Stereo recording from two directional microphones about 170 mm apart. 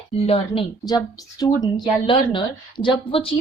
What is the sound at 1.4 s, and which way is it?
Speech, 25° left (ahead or behind).